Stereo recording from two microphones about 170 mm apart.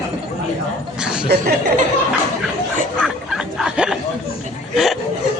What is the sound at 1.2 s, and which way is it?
Chuckle, 55° right (ahead or behind).